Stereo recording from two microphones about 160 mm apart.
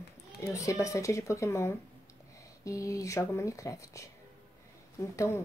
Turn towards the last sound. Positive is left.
turn(degrees=15)  # may be behind; listen again after turning